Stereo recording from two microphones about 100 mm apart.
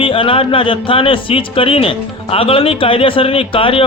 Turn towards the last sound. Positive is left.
turn(degrees=60)  # may be behind; listen again after turning